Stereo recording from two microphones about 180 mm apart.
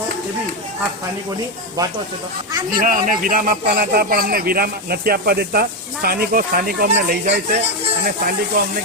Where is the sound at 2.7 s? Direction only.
50° right (ahead or behind).